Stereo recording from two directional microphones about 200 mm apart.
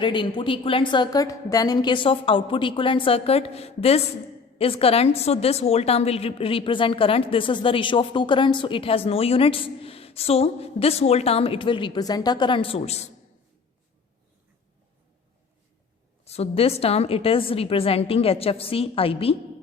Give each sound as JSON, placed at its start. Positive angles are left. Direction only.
{"t": 0.0, "sound": "a woman's voice", "side_deg": 25}
{"t": 16.2, "sound": "a woman's voice", "side_deg": 30}